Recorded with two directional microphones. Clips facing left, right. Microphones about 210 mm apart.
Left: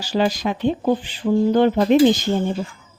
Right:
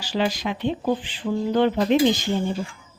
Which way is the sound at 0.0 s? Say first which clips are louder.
Left 4 dB; 40° left (ahead or behind).